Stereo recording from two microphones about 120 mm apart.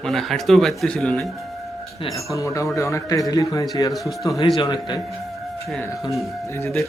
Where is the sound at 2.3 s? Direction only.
25° left (ahead or behind).